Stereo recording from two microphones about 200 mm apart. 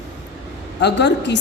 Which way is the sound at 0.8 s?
60° left (ahead or behind).